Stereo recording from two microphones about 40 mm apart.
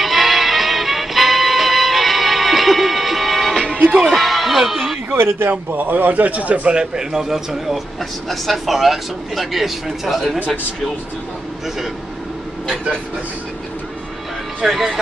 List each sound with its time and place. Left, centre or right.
0.0 s music: centre
4.1 s a sound: centre
5.1 s speech: right
5.7 s speech: right
6.7 s a man's voice: centre
14.6 s a man's voice: centre